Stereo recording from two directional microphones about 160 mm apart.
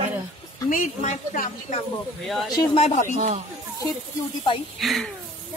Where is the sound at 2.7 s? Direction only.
45° left (ahead or behind).